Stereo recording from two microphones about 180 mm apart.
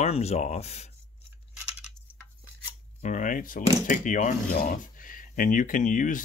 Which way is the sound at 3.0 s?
45° left (ahead or behind).